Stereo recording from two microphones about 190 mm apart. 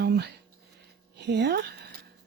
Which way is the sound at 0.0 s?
60° right (ahead or behind).